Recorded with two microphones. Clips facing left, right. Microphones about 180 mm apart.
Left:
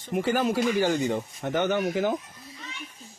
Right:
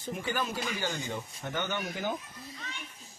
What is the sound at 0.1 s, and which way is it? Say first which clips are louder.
Speech: left 9 dB; 85° left.